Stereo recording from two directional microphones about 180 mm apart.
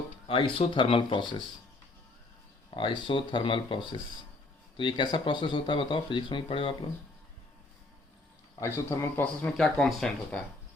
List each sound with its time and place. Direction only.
0.3 s speech: 30° left (ahead or behind)
2.6 s speech: 25° left (ahead or behind)
8.6 s speech: 15° left (ahead or behind)